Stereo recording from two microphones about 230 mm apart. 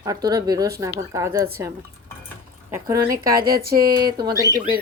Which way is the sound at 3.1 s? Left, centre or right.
Right.